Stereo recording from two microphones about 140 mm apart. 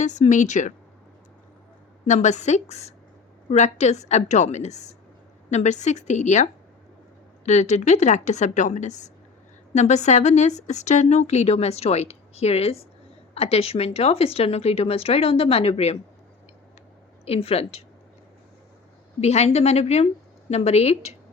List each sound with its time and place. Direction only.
0.0 s a woman's voice: 60° left (ahead or behind)
2.0 s a woman's voice: 55° left (ahead or behind)
17.2 s a woman's voice: 45° left (ahead or behind)
19.2 s a woman's voice: 50° left (ahead or behind)